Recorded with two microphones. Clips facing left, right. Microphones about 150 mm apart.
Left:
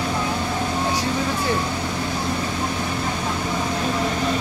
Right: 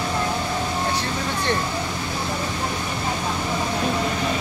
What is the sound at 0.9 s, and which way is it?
Speech, 5° left (ahead or behind).